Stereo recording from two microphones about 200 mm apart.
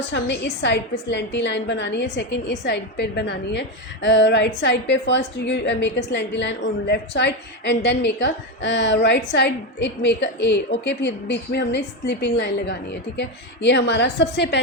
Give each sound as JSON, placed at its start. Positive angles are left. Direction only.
{"t": 0.1, "sound": "a woman's voice", "side_deg": 60}